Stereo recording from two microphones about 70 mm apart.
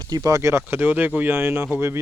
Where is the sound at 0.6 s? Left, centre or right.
Right.